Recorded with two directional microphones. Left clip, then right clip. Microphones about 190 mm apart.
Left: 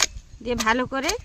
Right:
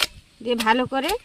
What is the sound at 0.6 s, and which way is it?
Speech, 30° right (ahead or behind).